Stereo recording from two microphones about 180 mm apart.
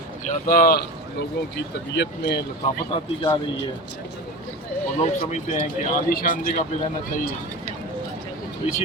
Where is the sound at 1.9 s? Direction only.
75° left (ahead or behind).